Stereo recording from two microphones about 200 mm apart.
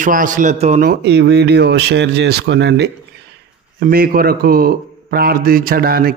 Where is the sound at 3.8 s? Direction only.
50° right (ahead or behind).